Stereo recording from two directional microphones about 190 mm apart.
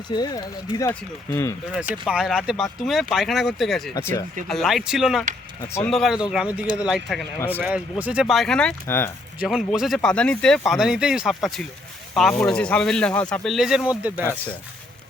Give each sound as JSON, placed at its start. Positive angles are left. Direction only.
{"t": 0.1, "sound": "speech", "side_deg": 20}
{"t": 1.7, "sound": "speech", "side_deg": -5}
{"t": 3.9, "sound": "speech", "side_deg": 15}
{"t": 4.4, "sound": "speech", "side_deg": 0}
{"t": 5.6, "sound": "speech", "side_deg": 15}
{"t": 5.9, "sound": "speech", "side_deg": 0}
{"t": 7.3, "sound": "speech", "side_deg": 10}
{"t": 7.6, "sound": "speech", "side_deg": -10}
{"t": 9.4, "sound": "speech", "side_deg": -5}